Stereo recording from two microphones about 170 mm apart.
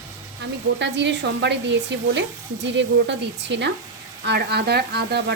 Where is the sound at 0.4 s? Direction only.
90° right.